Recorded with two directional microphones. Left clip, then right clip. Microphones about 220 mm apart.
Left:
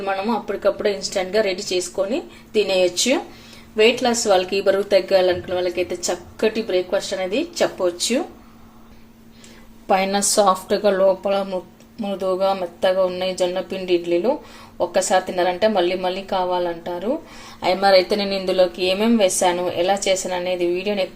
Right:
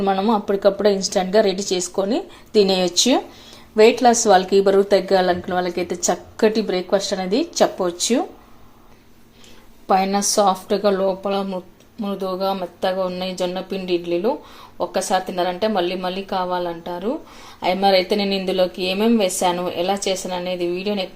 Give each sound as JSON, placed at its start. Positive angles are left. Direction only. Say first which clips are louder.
{"t": 0.0, "sound": "a woman's voice", "louder": "right 4 dB", "side_deg": -20}
{"t": 9.8, "sound": "a woman's voice", "louder": "right 1 dB", "side_deg": -5}